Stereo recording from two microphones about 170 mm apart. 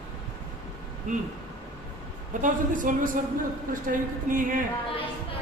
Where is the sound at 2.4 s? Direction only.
50° right (ahead or behind).